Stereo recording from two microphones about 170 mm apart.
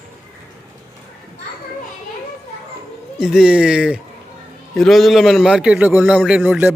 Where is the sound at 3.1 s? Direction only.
5° right (ahead or behind).